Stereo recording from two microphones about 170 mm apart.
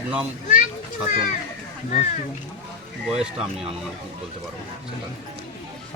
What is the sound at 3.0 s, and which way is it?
Speech, 5° right (ahead or behind).